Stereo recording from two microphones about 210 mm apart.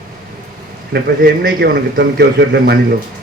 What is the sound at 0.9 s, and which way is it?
A man's voice, 50° right (ahead or behind).